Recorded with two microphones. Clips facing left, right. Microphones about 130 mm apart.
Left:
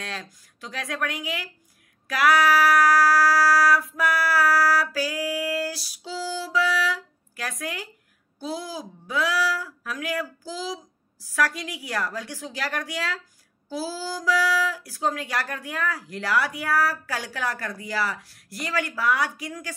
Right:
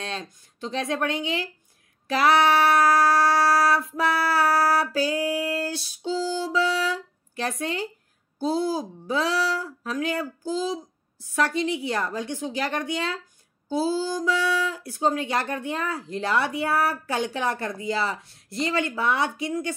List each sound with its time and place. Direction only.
0.0 s speech: 25° right (ahead or behind)